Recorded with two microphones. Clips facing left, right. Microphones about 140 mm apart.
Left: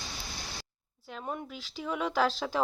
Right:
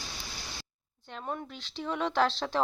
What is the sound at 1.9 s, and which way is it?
Speech, centre (ahead or behind).